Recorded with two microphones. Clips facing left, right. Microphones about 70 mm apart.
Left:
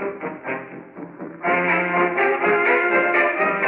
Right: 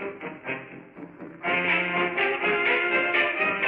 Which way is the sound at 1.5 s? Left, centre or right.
Left.